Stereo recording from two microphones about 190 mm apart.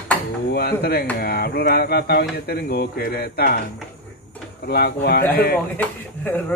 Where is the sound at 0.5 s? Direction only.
55° left (ahead or behind).